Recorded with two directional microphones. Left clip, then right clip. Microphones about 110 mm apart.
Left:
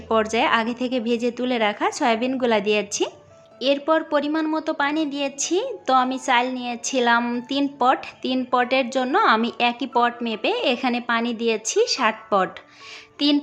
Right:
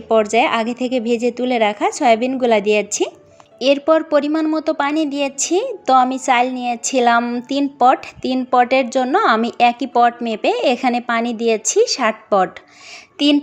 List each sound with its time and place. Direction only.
0.1 s a woman's voice: 30° right (ahead or behind)
3.6 s a woman's voice: 50° right (ahead or behind)
7.2 s a woman's voice: 30° right (ahead or behind)
7.8 s a woman's voice: 40° right (ahead or behind)